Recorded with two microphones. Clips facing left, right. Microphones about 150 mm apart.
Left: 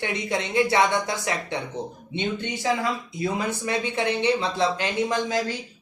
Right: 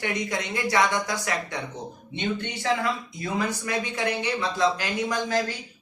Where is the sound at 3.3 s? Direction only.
25° left (ahead or behind).